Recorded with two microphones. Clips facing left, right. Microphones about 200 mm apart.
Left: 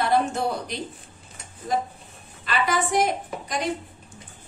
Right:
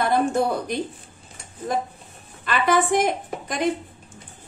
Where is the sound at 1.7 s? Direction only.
55° right (ahead or behind).